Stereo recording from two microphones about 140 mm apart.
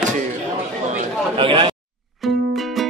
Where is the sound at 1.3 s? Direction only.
40° right (ahead or behind).